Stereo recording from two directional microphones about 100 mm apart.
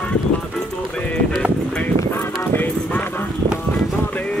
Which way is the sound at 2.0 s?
20° left (ahead or behind).